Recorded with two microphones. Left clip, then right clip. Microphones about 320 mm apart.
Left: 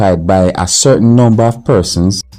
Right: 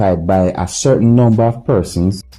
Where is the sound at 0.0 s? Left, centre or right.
Right.